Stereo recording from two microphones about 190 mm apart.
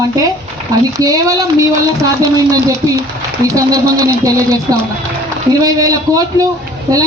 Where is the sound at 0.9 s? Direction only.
20° right (ahead or behind).